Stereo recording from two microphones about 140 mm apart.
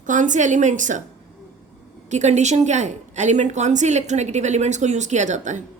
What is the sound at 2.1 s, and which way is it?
A woman's voice, 55° right (ahead or behind).